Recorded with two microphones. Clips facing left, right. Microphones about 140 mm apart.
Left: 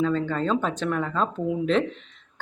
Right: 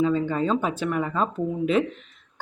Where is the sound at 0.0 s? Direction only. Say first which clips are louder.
Right 2 dB; 10° right (ahead or behind).